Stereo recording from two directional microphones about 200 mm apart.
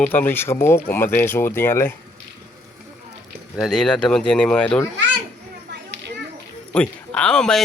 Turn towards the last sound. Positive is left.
turn(degrees=5)  # may be behind; listen again after turning